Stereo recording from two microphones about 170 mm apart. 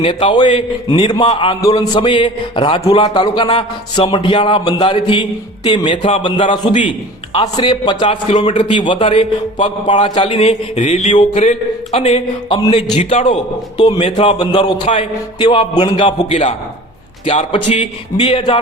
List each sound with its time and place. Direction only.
0.0 s a man's voice: 30° left (ahead or behind)
11.3 s a man's voice: 45° left (ahead or behind)